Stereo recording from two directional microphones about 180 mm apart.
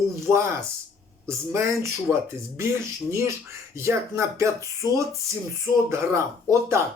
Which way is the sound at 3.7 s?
15° right (ahead or behind).